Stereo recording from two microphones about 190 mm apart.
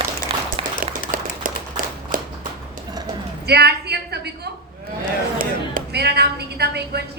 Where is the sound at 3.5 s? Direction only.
60° right (ahead or behind).